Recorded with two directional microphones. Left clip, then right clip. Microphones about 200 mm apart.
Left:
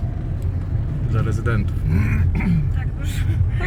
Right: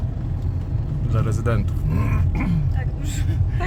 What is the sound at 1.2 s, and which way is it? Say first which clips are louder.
Speech: even; 20° right (ahead or behind).